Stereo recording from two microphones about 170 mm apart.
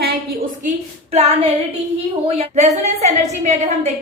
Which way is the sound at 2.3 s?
40° right (ahead or behind).